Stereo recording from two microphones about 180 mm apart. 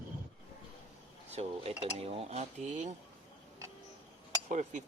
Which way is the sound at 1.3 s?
35° right (ahead or behind).